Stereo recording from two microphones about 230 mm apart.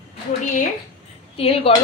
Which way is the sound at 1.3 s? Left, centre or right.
Left.